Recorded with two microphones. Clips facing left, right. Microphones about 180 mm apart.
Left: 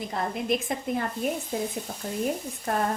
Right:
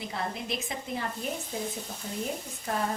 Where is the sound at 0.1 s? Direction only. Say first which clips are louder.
Left 8 dB; 50° left (ahead or behind).